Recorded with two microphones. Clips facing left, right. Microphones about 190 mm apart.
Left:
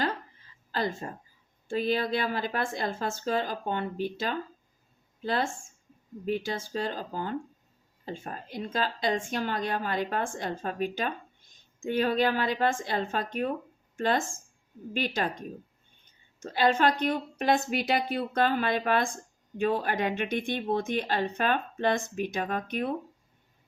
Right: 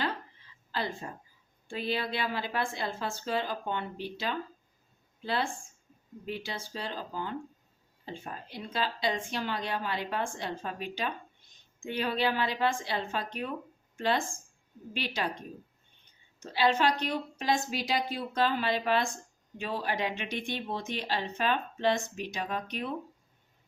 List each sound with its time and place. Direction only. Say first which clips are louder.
0.7 s a woman's voice: left 4 dB; 45° left (ahead or behind)